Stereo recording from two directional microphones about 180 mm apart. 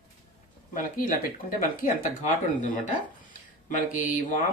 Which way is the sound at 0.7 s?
45° left (ahead or behind).